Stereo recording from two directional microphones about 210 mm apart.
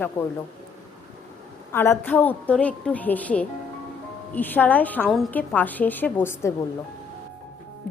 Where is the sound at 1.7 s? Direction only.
10° left (ahead or behind).